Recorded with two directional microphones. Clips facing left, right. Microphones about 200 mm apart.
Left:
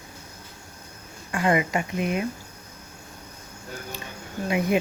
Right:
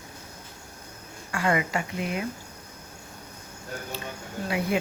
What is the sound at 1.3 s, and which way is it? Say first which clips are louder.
Speech: left 3 dB; 20° left (ahead or behind).